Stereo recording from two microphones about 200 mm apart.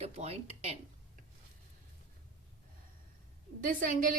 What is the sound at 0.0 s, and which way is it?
Speech, 30° right (ahead or behind).